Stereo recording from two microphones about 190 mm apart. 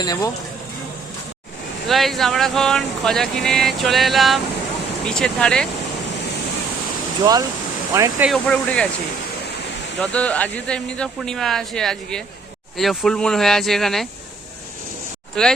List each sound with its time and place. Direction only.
0.0 s speech: 20° left (ahead or behind)
1.9 s speech: centre (ahead or behind)
7.2 s speech: 15° right (ahead or behind)
8.3 s speech: 5° left (ahead or behind)
10.0 s speech: 5° left (ahead or behind)
15.4 s speech: 5° left (ahead or behind)